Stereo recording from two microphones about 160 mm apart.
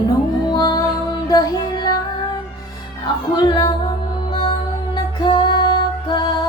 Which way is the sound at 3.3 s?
30° left (ahead or behind).